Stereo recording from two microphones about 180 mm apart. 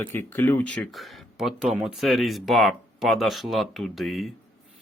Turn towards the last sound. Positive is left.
turn(degrees=0)  # may be behind; listen again after turning